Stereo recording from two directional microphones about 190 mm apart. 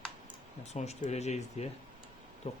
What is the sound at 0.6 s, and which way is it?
Speech, 35° left (ahead or behind).